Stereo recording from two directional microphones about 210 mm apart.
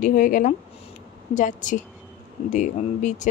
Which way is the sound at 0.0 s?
40° left (ahead or behind).